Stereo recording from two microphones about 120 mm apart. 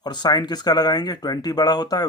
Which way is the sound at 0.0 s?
35° left (ahead or behind).